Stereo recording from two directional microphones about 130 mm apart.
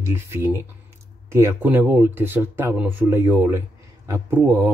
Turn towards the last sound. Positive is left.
turn(degrees=-20)  # may be behind; listen again after turning